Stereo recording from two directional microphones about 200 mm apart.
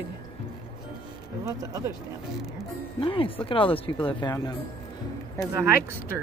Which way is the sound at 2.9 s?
25° left (ahead or behind).